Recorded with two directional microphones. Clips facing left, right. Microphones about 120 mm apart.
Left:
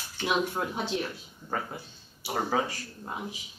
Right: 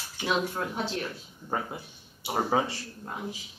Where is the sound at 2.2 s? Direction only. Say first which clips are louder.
Right 2 dB; 25° right (ahead or behind).